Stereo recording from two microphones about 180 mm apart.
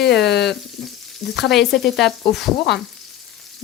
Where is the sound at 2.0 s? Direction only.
Centre (ahead or behind).